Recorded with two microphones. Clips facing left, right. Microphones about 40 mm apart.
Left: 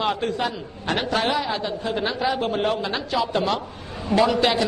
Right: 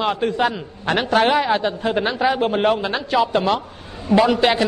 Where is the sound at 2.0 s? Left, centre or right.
Right.